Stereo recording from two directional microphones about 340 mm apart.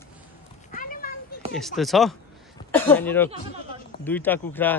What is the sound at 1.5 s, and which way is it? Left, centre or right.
Speech, centre.